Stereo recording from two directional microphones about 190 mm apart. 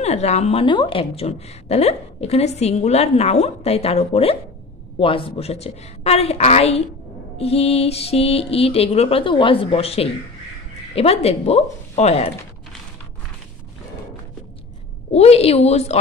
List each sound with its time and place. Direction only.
0.0 s a woman's voice: 35° left (ahead or behind)
15.1 s a woman's voice: 35° left (ahead or behind)